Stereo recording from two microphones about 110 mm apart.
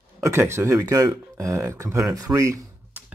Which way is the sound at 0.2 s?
25° right (ahead or behind).